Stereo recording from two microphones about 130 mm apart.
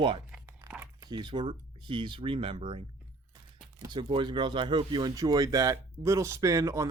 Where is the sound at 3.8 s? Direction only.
35° right (ahead or behind).